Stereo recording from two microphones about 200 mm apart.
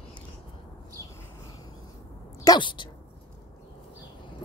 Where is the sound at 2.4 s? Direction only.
25° left (ahead or behind).